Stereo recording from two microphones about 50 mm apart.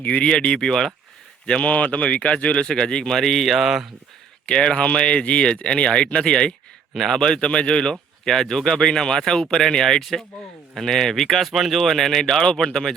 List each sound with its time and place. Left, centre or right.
0.0 s speech: left; by 3.8 s centre
4.4 s speech: centre
6.9 s speech: centre
7.2 s speech: centre